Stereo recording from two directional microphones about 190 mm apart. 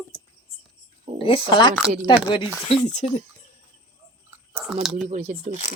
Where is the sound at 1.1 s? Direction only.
30° left (ahead or behind).